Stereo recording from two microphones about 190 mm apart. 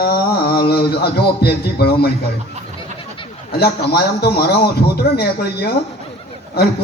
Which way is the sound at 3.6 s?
55° left (ahead or behind).